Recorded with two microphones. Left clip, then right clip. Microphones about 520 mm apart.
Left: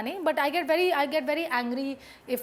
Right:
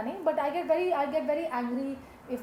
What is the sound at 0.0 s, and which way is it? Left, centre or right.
A woman's voice, left.